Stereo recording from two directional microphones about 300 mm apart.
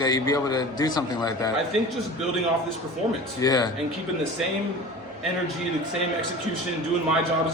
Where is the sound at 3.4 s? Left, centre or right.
Centre.